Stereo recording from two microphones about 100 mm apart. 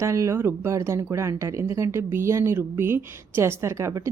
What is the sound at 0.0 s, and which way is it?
Speech, 30° right (ahead or behind).